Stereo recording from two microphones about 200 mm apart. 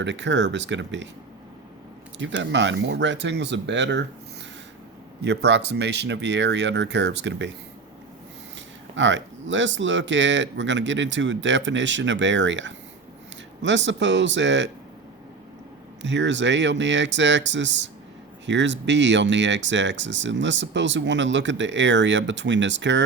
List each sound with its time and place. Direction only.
0.0 s speech: 65° right (ahead or behind)
2.1 s speech: 65° right (ahead or behind)
5.2 s speech: 60° right (ahead or behind)
9.0 s speech: 65° right (ahead or behind)
16.0 s speech: 65° right (ahead or behind)